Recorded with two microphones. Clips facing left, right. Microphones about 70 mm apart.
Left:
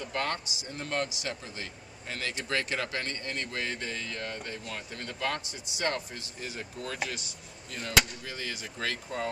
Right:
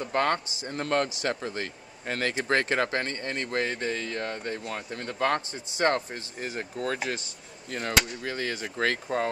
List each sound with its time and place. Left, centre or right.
0.0 s speech: right
0.7 s a man's voice: right
8.2 s speech: right